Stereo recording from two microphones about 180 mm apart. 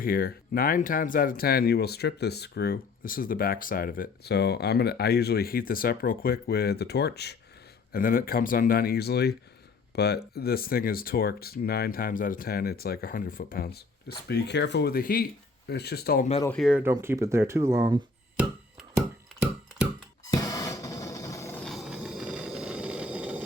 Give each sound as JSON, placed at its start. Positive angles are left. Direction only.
{"t": 0.0, "sound": "speech", "side_deg": 55}
{"t": 7.9, "sound": "speech", "side_deg": 55}
{"t": 14.3, "sound": "speech", "side_deg": 70}
{"t": 16.5, "sound": "speech", "side_deg": 0}
{"t": 20.3, "sound": "music", "side_deg": 20}
{"t": 21.6, "sound": "a sound", "side_deg": 0}